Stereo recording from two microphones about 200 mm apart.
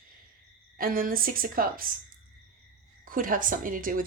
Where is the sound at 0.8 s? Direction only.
45° right (ahead or behind).